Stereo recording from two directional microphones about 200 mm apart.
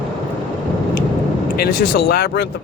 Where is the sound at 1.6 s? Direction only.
50° left (ahead or behind).